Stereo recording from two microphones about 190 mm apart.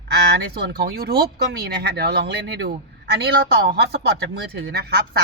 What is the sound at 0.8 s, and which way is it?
A woman's voice, 55° right (ahead or behind).